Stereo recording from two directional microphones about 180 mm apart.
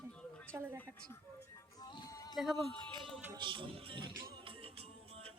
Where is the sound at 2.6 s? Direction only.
25° right (ahead or behind).